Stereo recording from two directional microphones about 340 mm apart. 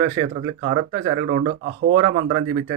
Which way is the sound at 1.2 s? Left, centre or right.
Right.